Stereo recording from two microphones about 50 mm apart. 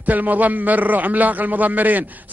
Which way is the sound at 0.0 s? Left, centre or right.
Right.